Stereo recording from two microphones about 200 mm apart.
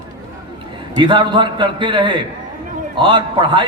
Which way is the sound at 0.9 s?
25° right (ahead or behind).